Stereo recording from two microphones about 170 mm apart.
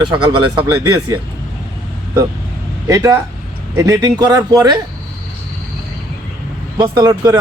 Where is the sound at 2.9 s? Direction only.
20° right (ahead or behind).